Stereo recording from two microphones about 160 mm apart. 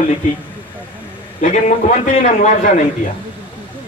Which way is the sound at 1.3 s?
50° left (ahead or behind).